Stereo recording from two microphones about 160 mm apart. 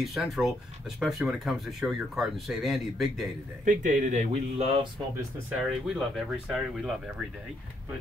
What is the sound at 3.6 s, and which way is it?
Speech, 55° right (ahead or behind).